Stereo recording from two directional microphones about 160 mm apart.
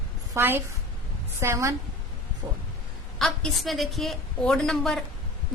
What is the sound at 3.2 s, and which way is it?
A woman's voice, centre (ahead or behind).